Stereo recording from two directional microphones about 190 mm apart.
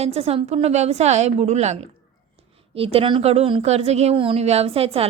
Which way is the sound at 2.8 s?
30° right (ahead or behind).